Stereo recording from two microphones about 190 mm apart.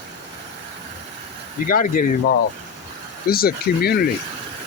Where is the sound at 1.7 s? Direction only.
45° left (ahead or behind).